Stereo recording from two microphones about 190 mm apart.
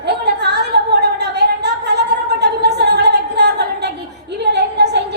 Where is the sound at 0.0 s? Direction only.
60° right (ahead or behind).